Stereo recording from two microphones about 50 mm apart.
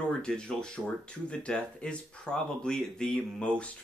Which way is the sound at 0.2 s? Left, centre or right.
Centre.